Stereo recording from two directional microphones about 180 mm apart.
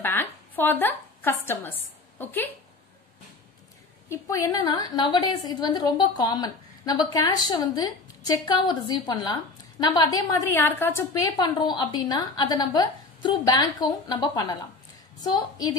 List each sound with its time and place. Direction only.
0.0 s a woman's voice: 10° left (ahead or behind)
4.1 s a woman's voice: 15° left (ahead or behind)